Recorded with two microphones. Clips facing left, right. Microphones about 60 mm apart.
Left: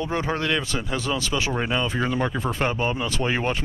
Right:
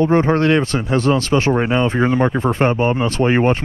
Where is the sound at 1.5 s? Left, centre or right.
Right.